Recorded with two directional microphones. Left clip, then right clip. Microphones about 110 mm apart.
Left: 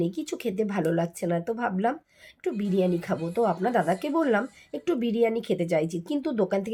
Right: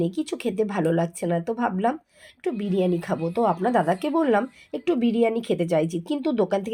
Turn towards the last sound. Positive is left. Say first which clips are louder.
# right 3 dB
turn(degrees=-10)  # may be behind; listen again after turning